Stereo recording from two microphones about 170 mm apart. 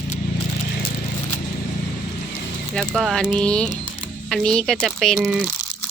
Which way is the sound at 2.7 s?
5° left (ahead or behind).